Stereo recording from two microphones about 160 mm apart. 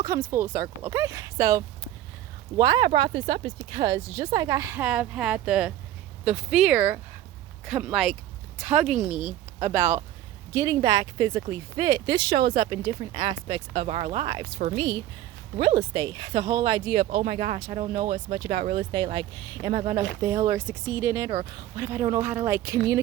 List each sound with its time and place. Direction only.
0.0 s speech: 20° right (ahead or behind)
15.5 s speech: 40° right (ahead or behind)
15.9 s speech: 25° right (ahead or behind)
20.2 s speech: 20° right (ahead or behind)